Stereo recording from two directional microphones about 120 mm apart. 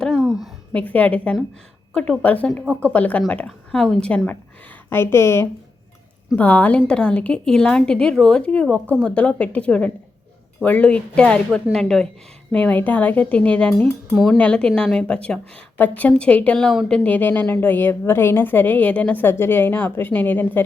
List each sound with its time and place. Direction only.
0.0 s a sound: 5° right (ahead or behind)
0.7 s a woman's voice: 10° left (ahead or behind)
4.9 s a woman's voice: 20° left (ahead or behind)